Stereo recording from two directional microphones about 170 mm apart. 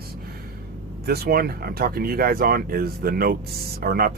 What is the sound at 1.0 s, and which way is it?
Speech, 65° right (ahead or behind).